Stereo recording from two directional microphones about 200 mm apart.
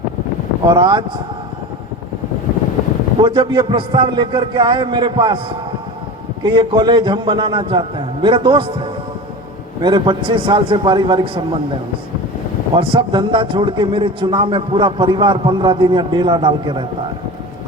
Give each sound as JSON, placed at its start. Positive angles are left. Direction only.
{"t": 0.7, "sound": "a man's voice", "side_deg": -20}
{"t": 3.2, "sound": "a man's voice", "side_deg": -20}
{"t": 12.7, "sound": "a man's voice", "side_deg": -25}